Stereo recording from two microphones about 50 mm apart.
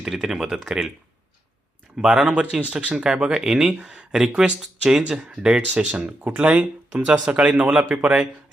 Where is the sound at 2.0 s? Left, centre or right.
Centre.